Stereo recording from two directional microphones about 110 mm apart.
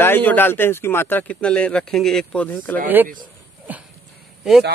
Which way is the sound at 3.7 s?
15° right (ahead or behind).